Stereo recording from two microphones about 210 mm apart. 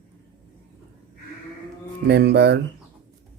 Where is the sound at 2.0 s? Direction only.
55° right (ahead or behind).